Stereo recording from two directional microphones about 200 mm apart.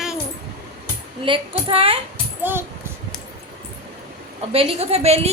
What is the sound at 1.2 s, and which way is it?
Speech, 25° right (ahead or behind).